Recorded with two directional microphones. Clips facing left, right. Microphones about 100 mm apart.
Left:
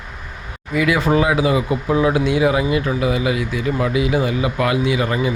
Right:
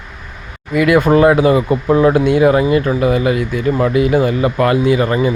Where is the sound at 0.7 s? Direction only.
55° right (ahead or behind).